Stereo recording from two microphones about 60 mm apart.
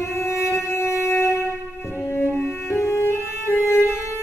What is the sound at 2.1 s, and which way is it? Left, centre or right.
Music, left.